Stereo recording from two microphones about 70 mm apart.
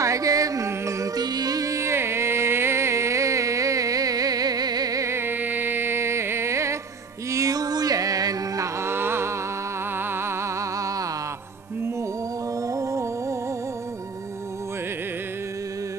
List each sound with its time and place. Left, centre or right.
0.0 s music: right
1.1 s music: right
5.0 s music: right
8.8 s a sound: right
12.6 s music: right